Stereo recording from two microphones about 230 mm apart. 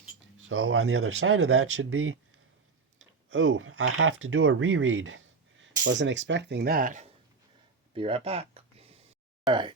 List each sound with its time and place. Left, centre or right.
0.2 s speech: right
3.2 s speech: right
7.9 s a sound: right
9.5 s speech: centre